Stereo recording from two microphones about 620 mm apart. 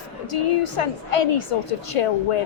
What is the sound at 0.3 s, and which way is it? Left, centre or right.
A woman's voice, left.